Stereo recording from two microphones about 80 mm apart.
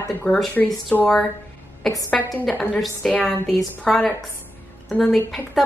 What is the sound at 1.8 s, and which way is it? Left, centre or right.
A woman's voice, centre.